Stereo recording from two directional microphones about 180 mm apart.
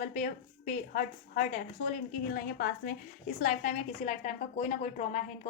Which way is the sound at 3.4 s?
40° left (ahead or behind).